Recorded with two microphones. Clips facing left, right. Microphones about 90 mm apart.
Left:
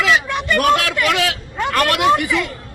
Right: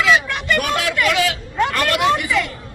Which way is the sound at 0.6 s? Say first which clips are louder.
Left 4 dB; 55° left (ahead or behind).